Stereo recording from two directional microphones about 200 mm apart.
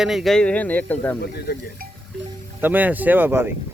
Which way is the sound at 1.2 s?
50° left (ahead or behind).